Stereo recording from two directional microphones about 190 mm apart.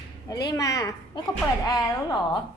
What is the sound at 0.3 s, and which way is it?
A woman's voice, 20° left (ahead or behind).